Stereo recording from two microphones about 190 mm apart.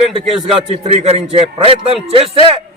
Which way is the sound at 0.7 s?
30° right (ahead or behind).